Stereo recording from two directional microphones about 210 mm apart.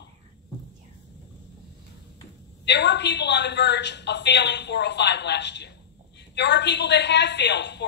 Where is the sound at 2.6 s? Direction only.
55° left (ahead or behind).